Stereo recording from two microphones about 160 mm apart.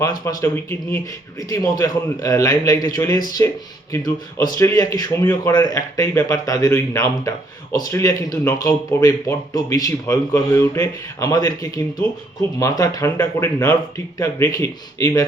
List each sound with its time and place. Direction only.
0.0 s a man's voice: 25° left (ahead or behind)